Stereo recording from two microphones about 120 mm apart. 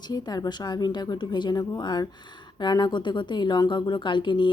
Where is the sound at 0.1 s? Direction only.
35° left (ahead or behind).